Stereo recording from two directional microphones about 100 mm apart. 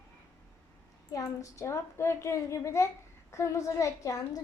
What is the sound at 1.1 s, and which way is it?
A woman's voice, 35° left (ahead or behind).